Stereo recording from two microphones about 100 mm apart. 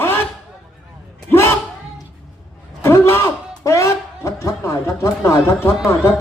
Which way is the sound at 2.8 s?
25° left (ahead or behind).